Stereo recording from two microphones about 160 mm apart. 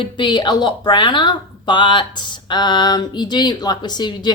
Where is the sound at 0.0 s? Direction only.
30° left (ahead or behind).